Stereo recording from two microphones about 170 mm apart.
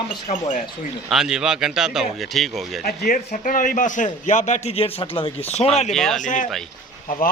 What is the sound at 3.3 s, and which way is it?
A man's voice, 50° left (ahead or behind).